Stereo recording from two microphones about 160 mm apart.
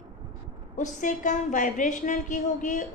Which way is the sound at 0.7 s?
50° left (ahead or behind).